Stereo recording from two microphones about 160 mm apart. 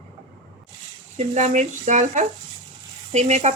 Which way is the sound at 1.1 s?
45° right (ahead or behind).